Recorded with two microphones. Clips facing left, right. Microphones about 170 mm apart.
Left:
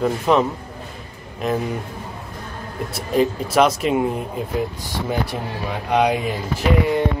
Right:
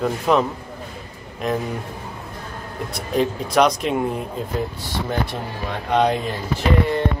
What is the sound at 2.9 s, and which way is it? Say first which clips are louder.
Speech: left 2 dB; centre (ahead or behind).